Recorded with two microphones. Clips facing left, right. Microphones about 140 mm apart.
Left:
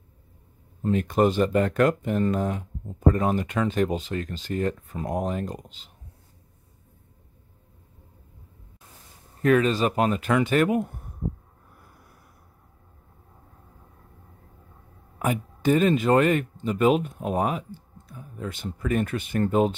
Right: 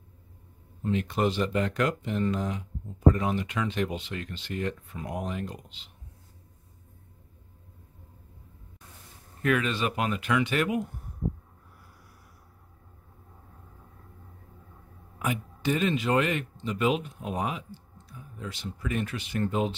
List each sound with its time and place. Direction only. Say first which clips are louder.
0.8 s speech: left 5 dB; 45° left (ahead or behind)
9.4 s speech: left 6 dB; 35° left (ahead or behind)
15.1 s speech: left 5 dB; 45° left (ahead or behind)